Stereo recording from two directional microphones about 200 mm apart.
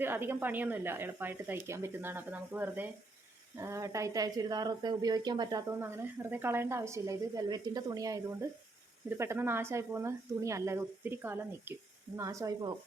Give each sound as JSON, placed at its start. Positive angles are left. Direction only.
{"t": 0.0, "sound": "speech", "side_deg": -10}